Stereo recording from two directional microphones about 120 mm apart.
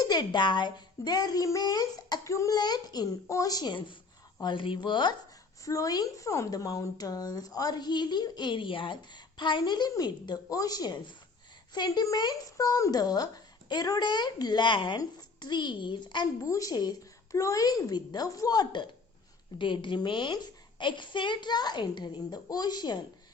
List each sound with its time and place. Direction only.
0.0 s speech: 35° left (ahead or behind)
5.6 s speech: 30° left (ahead or behind)